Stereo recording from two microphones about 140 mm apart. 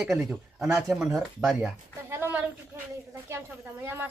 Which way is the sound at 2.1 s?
15° right (ahead or behind).